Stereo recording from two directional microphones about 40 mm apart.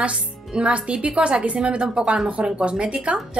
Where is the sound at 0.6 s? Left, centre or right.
Right.